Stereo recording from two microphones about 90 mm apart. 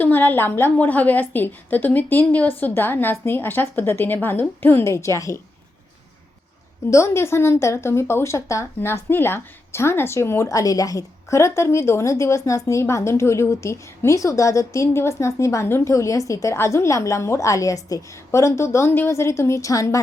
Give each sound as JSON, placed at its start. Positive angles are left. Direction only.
{"t": 0.0, "sound": "a woman's voice", "side_deg": 20}
{"t": 6.9, "sound": "speech", "side_deg": 30}